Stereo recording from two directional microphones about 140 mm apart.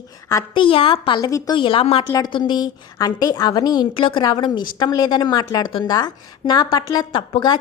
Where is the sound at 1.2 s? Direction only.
25° left (ahead or behind).